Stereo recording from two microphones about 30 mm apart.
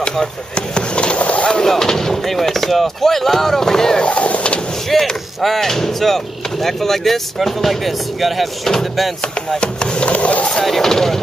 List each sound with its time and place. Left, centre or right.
0.6 s speech: left
1.2 s a sound: left
1.7 s speech: centre
4.0 s vehicle: left
4.8 s speech: centre
9.6 s speech: left
10.1 s speech: left
10.6 s speech: centre